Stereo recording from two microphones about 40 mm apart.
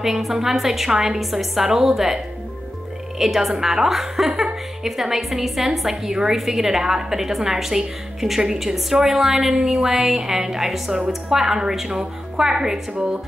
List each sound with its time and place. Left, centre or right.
0.0 s a woman's voice: centre
12.9 s speech: right